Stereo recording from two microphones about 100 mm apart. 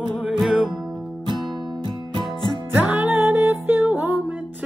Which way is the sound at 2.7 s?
15° right (ahead or behind).